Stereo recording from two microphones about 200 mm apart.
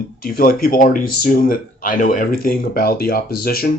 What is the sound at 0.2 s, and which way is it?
Speech, 45° left (ahead or behind).